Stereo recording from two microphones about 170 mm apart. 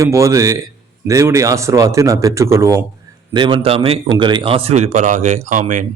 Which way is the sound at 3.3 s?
30° right (ahead or behind).